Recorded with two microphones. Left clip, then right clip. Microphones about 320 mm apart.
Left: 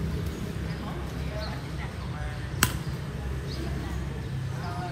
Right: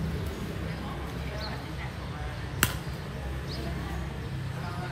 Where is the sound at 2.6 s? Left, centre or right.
Centre.